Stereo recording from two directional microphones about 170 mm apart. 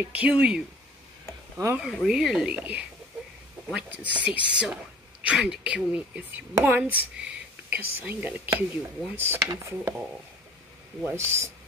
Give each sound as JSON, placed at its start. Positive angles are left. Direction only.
{"t": 0.0, "sound": "speech", "side_deg": -10}
{"t": 1.8, "sound": "speech", "side_deg": 0}